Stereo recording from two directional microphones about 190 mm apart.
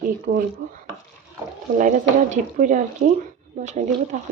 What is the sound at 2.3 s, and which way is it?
Speech, 40° right (ahead or behind).